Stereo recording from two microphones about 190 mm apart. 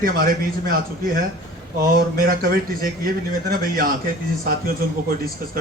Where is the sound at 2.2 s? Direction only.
50° right (ahead or behind).